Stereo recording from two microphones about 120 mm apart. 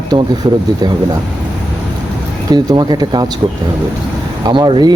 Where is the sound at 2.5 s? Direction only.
35° right (ahead or behind).